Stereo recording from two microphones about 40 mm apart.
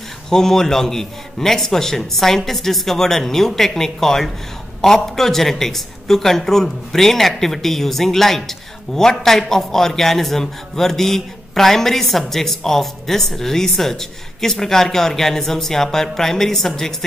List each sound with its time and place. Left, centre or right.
0.3 s a man's voice: centre